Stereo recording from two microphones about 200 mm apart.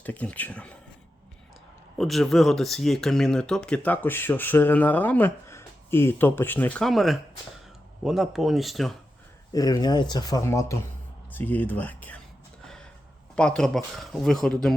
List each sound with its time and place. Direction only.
0.0 s speech: 10° left (ahead or behind)
2.0 s speech: centre (ahead or behind)
9.5 s speech: 20° left (ahead or behind)
13.3 s speech: 5° left (ahead or behind)